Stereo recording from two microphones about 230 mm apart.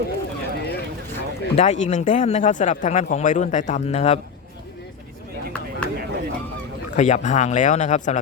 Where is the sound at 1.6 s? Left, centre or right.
Left.